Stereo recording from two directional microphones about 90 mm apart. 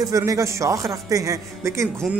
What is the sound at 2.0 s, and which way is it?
Speech, centre (ahead or behind).